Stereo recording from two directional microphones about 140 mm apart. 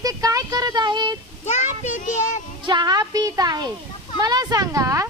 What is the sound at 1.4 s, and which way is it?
Speech, 55° left (ahead or behind).